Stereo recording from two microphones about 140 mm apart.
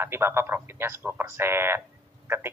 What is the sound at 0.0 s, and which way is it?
A man's voice, 15° right (ahead or behind).